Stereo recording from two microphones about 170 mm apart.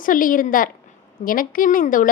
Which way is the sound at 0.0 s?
55° left (ahead or behind).